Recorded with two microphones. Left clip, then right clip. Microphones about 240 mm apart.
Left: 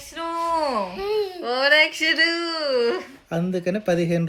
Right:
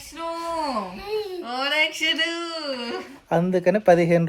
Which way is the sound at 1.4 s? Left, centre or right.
Right.